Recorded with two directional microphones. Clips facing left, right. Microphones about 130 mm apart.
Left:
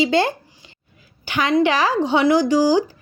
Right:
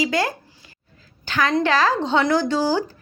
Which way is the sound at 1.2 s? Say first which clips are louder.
Left 3 dB; 15° left (ahead or behind).